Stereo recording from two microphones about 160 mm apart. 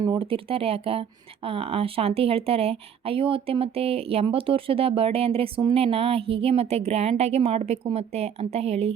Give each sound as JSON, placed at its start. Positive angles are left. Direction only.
{"t": 0.0, "sound": "speech", "side_deg": -30}